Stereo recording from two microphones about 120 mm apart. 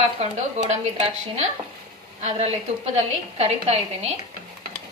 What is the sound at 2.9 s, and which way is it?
Speech, 60° right (ahead or behind).